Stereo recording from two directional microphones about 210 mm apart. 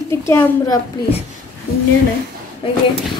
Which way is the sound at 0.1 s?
15° left (ahead or behind).